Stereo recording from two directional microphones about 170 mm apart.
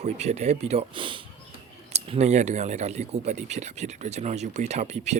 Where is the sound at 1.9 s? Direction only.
40° right (ahead or behind).